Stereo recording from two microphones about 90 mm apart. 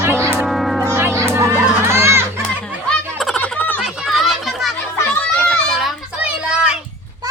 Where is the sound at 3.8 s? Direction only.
5° right (ahead or behind).